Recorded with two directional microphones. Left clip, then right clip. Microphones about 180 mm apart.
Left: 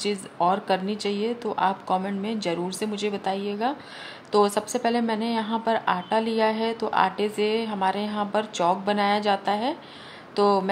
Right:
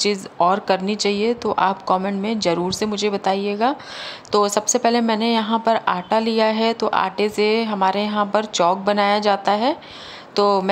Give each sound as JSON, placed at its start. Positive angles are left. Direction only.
{"t": 0.0, "sound": "a woman's voice", "side_deg": -20}